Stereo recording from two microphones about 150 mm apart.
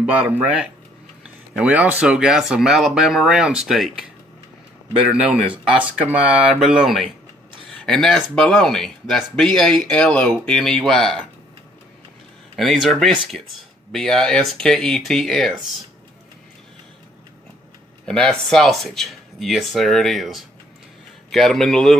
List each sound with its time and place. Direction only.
0.0 s speech: 10° right (ahead or behind)
5.1 s speech: 5° right (ahead or behind)
12.5 s speech: centre (ahead or behind)
18.0 s speech: 5° left (ahead or behind)